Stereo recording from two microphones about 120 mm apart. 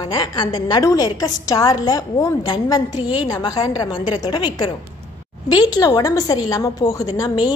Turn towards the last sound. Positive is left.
turn(degrees=35)  # may be behind; listen again after turning